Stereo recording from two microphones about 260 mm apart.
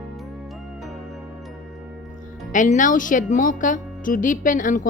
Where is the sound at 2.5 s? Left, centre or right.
Left.